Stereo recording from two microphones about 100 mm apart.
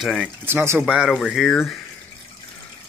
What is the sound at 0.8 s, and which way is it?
Speech, 10° right (ahead or behind).